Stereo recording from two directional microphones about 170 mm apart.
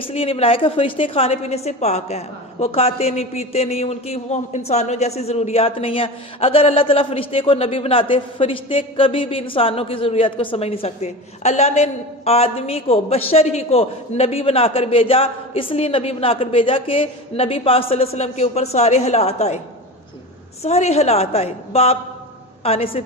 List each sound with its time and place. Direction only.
0.0 s a woman's voice: 35° left (ahead or behind)
20.6 s a woman's voice: 40° left (ahead or behind)